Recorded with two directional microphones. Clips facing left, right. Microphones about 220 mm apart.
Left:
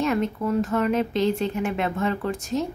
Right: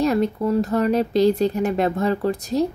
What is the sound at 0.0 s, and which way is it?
Speech, 35° right (ahead or behind).